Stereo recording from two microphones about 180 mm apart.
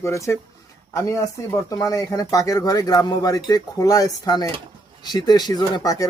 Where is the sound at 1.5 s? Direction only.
20° left (ahead or behind).